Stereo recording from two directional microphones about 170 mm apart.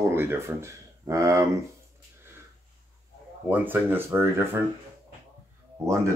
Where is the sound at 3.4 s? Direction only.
10° right (ahead or behind).